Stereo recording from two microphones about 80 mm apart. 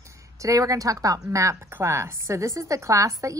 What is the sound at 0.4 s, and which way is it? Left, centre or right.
A woman's voice, right.